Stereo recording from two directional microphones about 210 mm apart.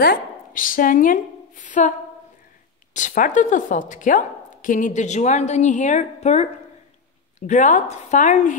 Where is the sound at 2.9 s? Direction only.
40° left (ahead or behind).